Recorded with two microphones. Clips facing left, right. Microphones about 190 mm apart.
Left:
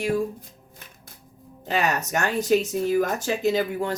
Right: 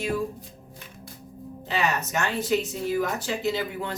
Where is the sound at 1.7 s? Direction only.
40° left (ahead or behind).